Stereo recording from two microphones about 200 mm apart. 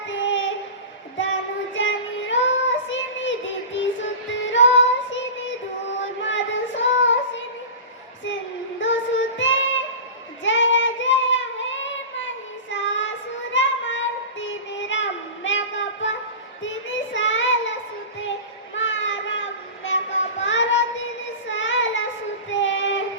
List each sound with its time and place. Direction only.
0.1 s child singing: 70° left (ahead or behind)
8.8 s child singing: 70° left (ahead or behind)